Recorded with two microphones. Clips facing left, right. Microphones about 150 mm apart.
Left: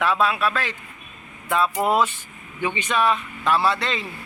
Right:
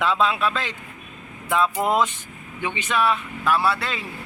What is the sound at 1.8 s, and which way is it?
A man's voice, 15° right (ahead or behind).